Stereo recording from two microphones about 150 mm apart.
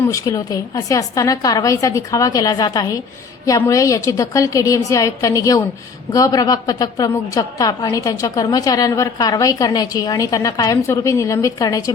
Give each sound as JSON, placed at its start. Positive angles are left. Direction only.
{"t": 0.1, "sound": "a woman's voice", "side_deg": 20}